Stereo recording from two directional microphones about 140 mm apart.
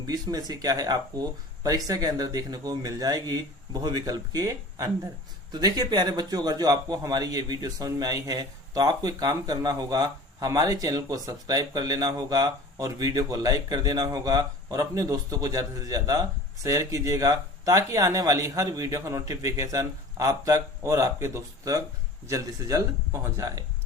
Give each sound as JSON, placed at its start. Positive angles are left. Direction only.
{"t": 0.1, "sound": "a man's voice", "side_deg": -25}